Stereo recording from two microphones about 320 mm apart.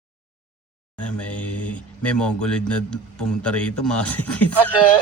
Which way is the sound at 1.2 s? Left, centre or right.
Centre.